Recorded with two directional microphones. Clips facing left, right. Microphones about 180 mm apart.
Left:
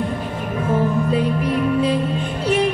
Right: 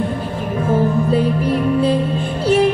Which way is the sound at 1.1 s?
35° right (ahead or behind).